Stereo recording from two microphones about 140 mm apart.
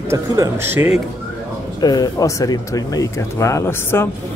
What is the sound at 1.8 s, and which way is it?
Speech, 25° left (ahead or behind).